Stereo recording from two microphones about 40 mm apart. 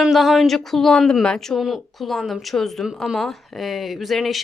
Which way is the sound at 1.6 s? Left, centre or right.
Centre.